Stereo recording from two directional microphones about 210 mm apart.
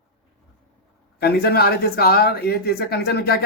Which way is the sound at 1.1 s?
50° left (ahead or behind).